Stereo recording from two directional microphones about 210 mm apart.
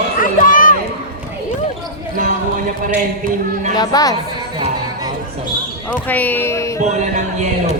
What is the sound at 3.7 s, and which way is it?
Speech, 20° left (ahead or behind).